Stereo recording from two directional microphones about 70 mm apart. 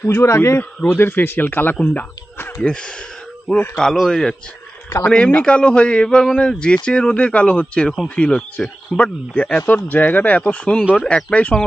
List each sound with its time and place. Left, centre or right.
0.0 s speech: left
2.6 s a man's voice: centre
3.5 s speech: centre
4.1 s a man's voice: centre